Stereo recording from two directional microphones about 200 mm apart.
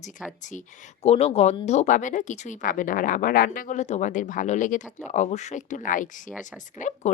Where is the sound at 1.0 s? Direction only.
30° left (ahead or behind).